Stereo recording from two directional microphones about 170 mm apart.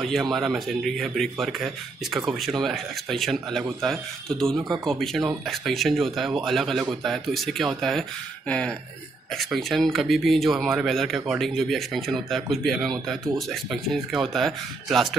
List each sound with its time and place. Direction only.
0.0 s speech: centre (ahead or behind)